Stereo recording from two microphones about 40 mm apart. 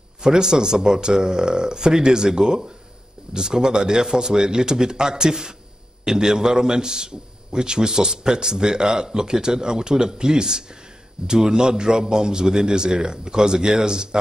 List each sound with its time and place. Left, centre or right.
0.2 s a man's voice: centre